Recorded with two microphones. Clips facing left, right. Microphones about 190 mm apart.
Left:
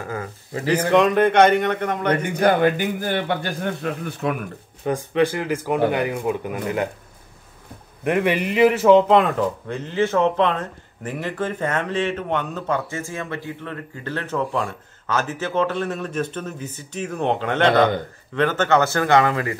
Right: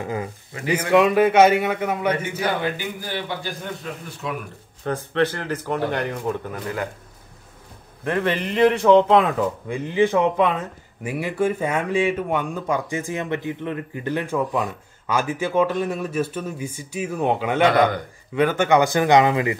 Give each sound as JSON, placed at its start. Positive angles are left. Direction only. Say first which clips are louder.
{"t": 0.0, "sound": "a man's voice", "louder": "right 2 dB", "side_deg": -20}
{"t": 0.7, "sound": "a man's voice", "louder": "even", "side_deg": -5}
{"t": 2.3, "sound": "a man's voice", "louder": "left 7 dB", "side_deg": 55}
{"t": 4.8, "sound": "speech", "louder": "left 2 dB", "side_deg": 10}
{"t": 8.0, "sound": "a man's voice", "louder": "left 3 dB", "side_deg": 15}
{"t": 17.6, "sound": "speech", "louder": "left 2 dB", "side_deg": 25}
{"t": 18.3, "sound": "a man's voice", "louder": "right 1 dB", "side_deg": -10}